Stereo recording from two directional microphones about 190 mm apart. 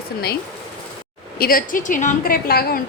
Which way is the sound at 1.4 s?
50° left (ahead or behind).